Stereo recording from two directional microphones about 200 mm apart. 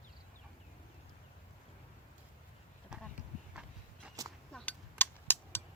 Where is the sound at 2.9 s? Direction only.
5° right (ahead or behind).